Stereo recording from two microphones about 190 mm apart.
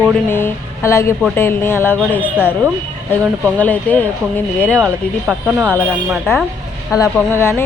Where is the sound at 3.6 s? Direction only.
10° left (ahead or behind).